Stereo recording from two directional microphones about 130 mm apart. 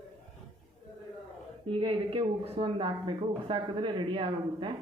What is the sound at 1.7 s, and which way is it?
Speech, 40° right (ahead or behind).